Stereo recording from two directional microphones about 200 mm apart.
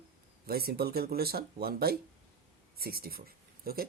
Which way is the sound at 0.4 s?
50° right (ahead or behind).